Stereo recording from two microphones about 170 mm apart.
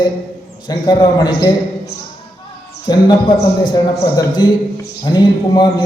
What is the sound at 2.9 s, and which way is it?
A man's voice, 25° left (ahead or behind).